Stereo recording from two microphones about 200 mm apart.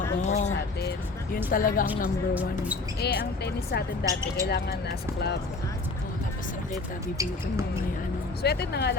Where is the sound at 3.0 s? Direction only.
55° left (ahead or behind).